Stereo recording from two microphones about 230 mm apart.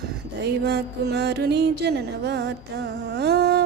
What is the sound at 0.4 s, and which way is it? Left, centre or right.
Music, right.